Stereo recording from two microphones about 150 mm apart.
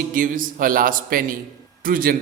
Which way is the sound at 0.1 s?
65° right (ahead or behind).